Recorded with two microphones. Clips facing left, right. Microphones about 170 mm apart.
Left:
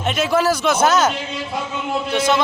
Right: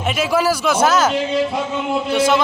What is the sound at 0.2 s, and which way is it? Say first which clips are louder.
Speech: even; 5° right (ahead or behind).